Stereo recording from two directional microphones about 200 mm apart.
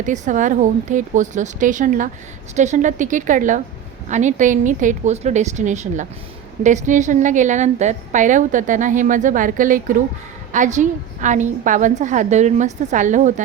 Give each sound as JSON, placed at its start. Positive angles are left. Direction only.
{"t": 0.0, "sound": "a woman's voice", "side_deg": -40}